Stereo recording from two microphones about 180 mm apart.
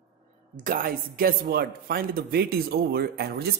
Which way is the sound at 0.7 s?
50° right (ahead or behind).